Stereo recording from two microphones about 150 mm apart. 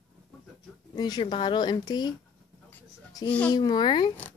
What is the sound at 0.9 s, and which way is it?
Speech, 25° left (ahead or behind).